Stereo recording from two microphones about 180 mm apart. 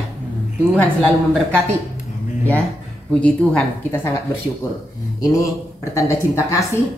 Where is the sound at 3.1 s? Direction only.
5° left (ahead or behind).